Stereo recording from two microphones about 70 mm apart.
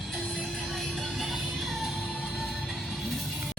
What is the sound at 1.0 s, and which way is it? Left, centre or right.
Music, centre.